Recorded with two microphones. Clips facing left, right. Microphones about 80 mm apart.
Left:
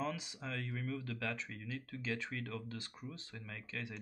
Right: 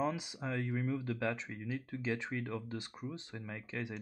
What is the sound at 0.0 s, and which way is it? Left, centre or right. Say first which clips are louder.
Speech: right 5 dB; centre.